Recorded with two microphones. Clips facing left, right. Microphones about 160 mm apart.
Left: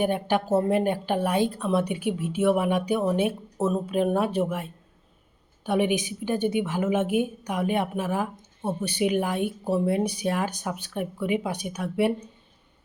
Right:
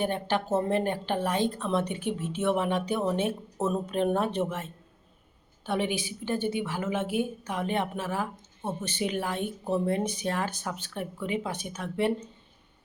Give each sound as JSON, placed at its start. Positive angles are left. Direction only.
{"t": 0.0, "sound": "a woman's voice", "side_deg": 15}